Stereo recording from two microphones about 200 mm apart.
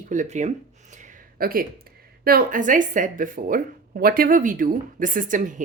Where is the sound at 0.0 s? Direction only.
40° right (ahead or behind).